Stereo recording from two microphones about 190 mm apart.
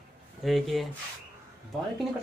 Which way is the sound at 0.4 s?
Centre (ahead or behind).